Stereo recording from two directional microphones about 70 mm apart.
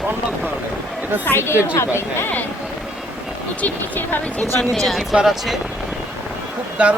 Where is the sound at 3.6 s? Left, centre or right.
Left.